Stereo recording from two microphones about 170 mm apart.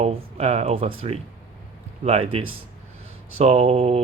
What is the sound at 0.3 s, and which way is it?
Speech, 40° right (ahead or behind).